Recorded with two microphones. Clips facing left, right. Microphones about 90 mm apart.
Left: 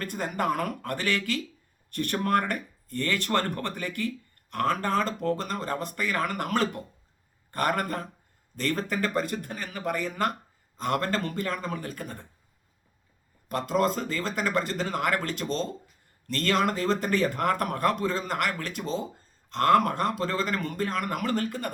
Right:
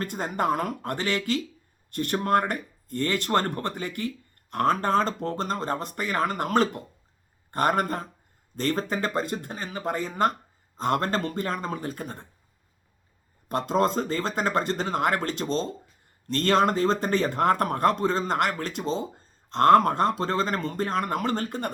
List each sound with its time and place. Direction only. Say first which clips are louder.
0.0 s speech: right 2 dB; 25° right (ahead or behind)
13.5 s speech: right 2 dB; 25° right (ahead or behind)